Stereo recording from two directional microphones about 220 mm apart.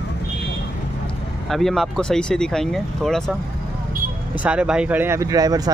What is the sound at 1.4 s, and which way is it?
Speech, centre (ahead or behind).